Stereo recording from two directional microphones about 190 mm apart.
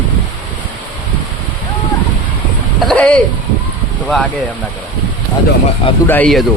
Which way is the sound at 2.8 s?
5° left (ahead or behind).